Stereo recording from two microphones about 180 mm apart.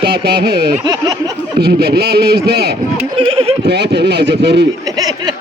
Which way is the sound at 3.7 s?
65° right (ahead or behind).